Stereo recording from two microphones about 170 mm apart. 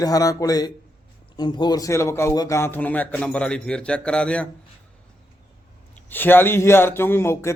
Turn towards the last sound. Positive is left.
turn(degrees=15)  # may be behind; listen again after turning